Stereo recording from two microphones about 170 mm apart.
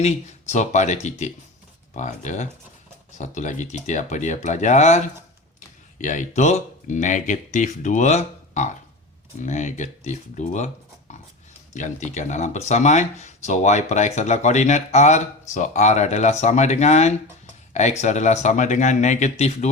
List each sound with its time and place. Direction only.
0.0 s speech: 40° left (ahead or behind)
11.1 s dog: 40° left (ahead or behind)
11.7 s speech: 45° left (ahead or behind)